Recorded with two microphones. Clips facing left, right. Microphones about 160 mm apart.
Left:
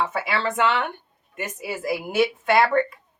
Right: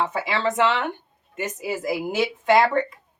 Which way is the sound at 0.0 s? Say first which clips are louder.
Right 1 dB; 20° right (ahead or behind).